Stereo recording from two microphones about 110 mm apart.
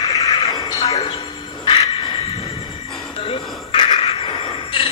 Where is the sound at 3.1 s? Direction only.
60° left (ahead or behind).